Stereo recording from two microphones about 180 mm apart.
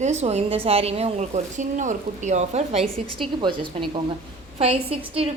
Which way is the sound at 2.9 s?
25° right (ahead or behind).